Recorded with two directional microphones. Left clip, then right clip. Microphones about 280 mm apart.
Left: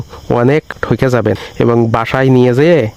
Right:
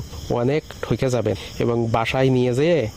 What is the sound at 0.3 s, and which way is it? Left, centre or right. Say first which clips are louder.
Speech: left 10 dB; left.